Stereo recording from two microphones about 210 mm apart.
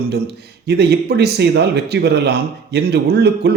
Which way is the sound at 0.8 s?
50° right (ahead or behind).